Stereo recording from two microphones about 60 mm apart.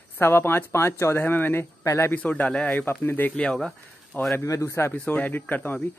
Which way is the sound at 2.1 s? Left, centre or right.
Left.